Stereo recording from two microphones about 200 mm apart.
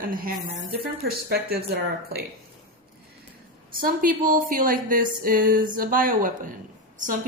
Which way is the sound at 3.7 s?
45° right (ahead or behind).